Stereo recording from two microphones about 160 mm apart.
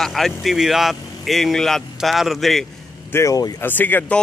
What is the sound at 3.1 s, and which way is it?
Speech, 20° left (ahead or behind).